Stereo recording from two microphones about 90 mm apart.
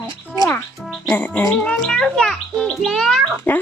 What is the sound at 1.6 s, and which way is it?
Music, 10° left (ahead or behind).